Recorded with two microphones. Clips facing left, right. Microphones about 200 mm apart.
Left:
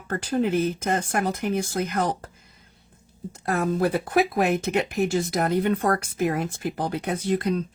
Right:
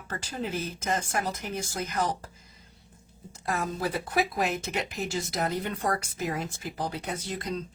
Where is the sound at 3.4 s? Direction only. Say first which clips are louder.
Left 7 dB; 60° left (ahead or behind).